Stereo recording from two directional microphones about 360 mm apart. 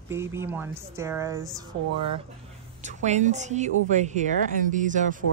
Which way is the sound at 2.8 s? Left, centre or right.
Centre.